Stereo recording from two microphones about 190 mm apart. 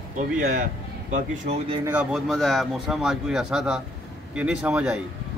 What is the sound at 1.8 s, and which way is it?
A man's voice, 5° right (ahead or behind).